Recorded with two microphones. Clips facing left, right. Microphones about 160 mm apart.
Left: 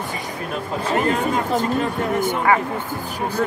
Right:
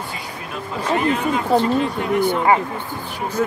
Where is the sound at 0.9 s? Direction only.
40° left (ahead or behind).